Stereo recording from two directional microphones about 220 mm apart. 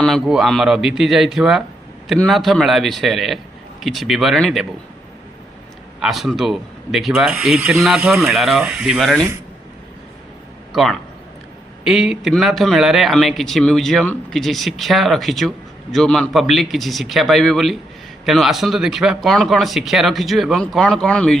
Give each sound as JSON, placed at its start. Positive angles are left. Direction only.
{"t": 0.0, "sound": "speech", "side_deg": 0}
{"t": 6.0, "sound": "speech", "side_deg": 0}
{"t": 10.7, "sound": "speech", "side_deg": 0}